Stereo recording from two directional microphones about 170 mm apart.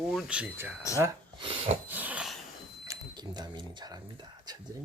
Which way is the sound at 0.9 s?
20° right (ahead or behind).